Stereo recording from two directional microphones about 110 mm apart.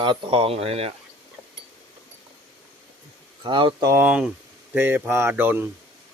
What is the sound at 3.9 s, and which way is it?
Speech, 15° right (ahead or behind).